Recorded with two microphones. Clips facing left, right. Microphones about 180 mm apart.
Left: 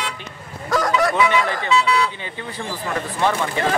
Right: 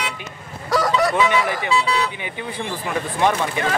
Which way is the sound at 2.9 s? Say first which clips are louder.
Right 1 dB; 15° right (ahead or behind).